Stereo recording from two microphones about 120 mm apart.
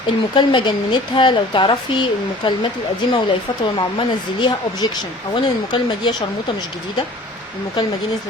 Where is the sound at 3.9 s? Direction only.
40° left (ahead or behind).